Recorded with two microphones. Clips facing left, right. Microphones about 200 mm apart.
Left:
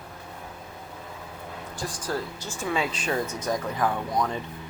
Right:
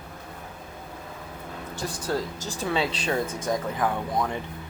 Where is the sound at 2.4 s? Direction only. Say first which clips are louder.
Right 1 dB; 35° right (ahead or behind).